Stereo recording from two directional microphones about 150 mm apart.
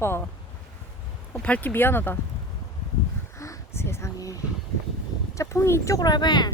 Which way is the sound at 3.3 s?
20° left (ahead or behind).